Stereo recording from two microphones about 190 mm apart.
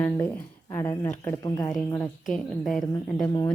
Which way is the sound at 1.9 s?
5° left (ahead or behind).